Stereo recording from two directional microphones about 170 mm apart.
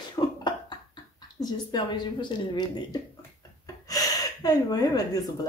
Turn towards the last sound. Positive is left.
turn(degrees=20)  # may be behind; listen again after turning